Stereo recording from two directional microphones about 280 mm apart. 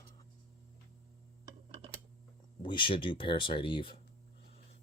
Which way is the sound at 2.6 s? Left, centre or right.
Centre.